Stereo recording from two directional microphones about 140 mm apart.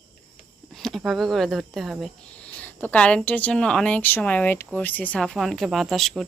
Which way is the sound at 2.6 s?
10° left (ahead or behind).